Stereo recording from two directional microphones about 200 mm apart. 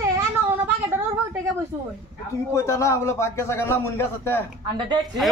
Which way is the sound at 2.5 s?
15° left (ahead or behind).